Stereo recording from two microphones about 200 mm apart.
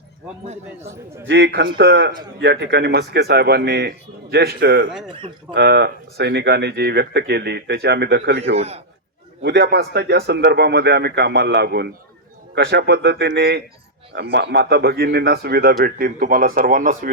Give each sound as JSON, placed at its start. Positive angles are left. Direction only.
{"t": 1.3, "sound": "speech", "side_deg": -60}
{"t": 5.0, "sound": "speech", "side_deg": -25}
{"t": 5.5, "sound": "speech", "side_deg": -55}
{"t": 8.5, "sound": "a man's voice", "side_deg": -30}
{"t": 9.4, "sound": "speech", "side_deg": -55}